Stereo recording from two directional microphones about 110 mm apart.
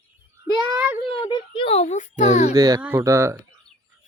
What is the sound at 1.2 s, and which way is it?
A child's voice, 55° left (ahead or behind).